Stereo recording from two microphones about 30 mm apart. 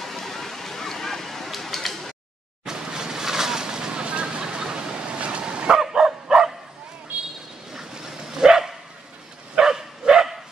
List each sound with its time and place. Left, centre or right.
0.0 s a sound: centre
2.6 s vehicle: right
4.4 s bow-wow: right
5.7 s dog: centre
7.1 s vehicle: right
7.7 s dog: centre
9.6 s bow-wow: centre